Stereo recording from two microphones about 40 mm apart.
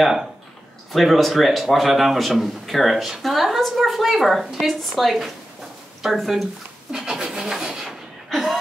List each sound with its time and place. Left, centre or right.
0.0 s speech: centre
0.9 s a man's voice: centre
6.9 s speech: centre